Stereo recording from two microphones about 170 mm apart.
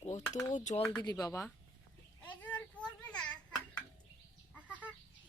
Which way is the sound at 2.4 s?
10° left (ahead or behind).